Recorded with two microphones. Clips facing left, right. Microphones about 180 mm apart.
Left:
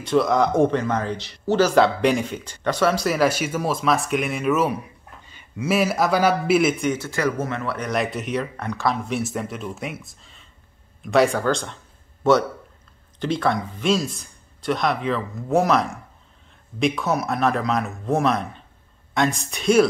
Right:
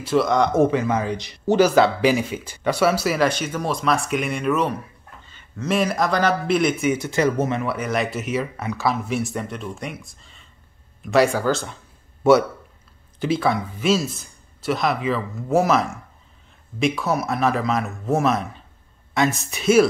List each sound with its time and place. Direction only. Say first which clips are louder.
0.0 s speech: even; centre (ahead or behind)
1.7 s speech: right 1 dB; centre (ahead or behind)
7.0 s a man's voice: right 3 dB; 20° right (ahead or behind); by 19.9 s 5° right (ahead or behind)